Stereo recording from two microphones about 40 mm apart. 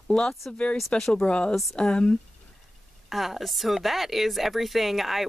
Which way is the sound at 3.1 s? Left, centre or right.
Centre.